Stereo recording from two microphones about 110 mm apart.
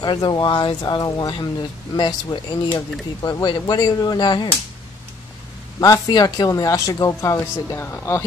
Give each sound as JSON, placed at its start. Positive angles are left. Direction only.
{"t": 0.0, "sound": "speech", "side_deg": 40}
{"t": 5.8, "sound": "speech", "side_deg": 35}